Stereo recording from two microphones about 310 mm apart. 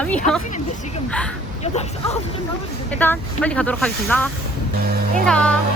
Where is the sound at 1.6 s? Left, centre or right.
Centre.